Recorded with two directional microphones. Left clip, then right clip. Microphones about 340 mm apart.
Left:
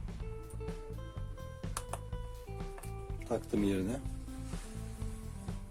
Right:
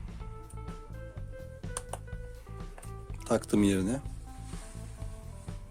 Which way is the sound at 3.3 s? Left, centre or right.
Right.